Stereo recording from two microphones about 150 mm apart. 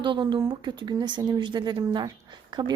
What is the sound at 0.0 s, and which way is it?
Speech, 30° right (ahead or behind).